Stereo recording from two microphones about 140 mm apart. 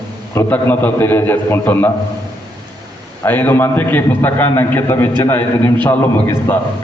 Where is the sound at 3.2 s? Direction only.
15° left (ahead or behind).